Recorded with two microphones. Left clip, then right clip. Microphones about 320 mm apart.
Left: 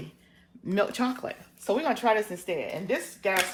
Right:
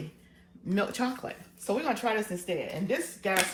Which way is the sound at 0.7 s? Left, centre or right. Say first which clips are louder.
Left 3 dB; left.